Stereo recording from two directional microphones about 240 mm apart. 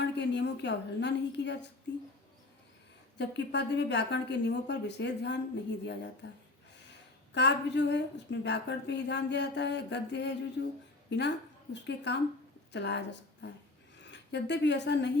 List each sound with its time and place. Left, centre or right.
0.0 s a woman's voice: left
3.2 s a woman's voice: left
7.3 s a woman's voice: left